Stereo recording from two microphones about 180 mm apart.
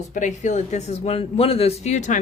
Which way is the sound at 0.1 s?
45° left (ahead or behind).